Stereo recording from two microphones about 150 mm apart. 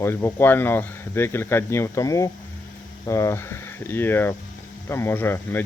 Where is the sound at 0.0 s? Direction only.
15° left (ahead or behind).